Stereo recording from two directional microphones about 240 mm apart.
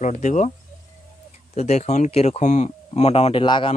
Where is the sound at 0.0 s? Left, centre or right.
Left.